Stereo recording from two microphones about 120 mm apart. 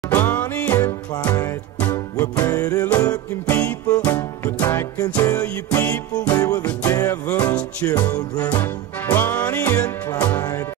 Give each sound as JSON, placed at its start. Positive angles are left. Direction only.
{"t": 0.1, "sound": "music", "side_deg": 15}
{"t": 3.5, "sound": "music", "side_deg": 10}
{"t": 4.6, "sound": "music", "side_deg": 25}
{"t": 5.7, "sound": "music", "side_deg": 15}
{"t": 6.2, "sound": "music", "side_deg": 30}
{"t": 6.6, "sound": "music", "side_deg": 15}
{"t": 7.0, "sound": "music", "side_deg": 30}
{"t": 7.3, "sound": "music", "side_deg": 10}